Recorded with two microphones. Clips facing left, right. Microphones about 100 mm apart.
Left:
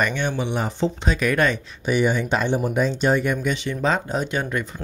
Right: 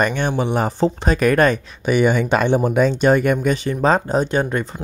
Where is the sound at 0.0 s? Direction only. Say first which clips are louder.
Right 4 dB; 40° right (ahead or behind).